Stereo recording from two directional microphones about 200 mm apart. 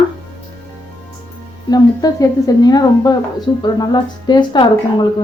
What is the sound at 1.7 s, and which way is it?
Speech, 20° left (ahead or behind).